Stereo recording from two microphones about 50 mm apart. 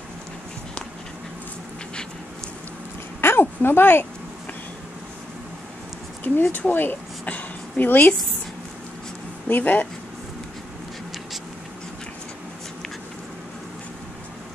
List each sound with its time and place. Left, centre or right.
3.2 s a woman's voice: left
6.2 s speech: left
6.7 s a sound: left
9.5 s speech: left